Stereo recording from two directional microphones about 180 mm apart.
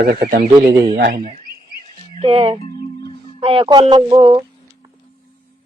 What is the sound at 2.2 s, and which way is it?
Speech, 30° right (ahead or behind).